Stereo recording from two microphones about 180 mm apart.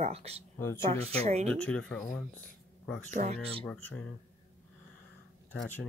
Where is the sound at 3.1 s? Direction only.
40° right (ahead or behind).